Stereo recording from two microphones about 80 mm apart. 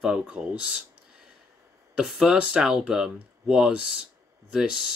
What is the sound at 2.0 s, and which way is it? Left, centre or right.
Speech, centre.